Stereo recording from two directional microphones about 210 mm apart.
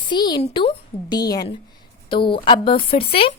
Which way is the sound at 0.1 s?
20° left (ahead or behind).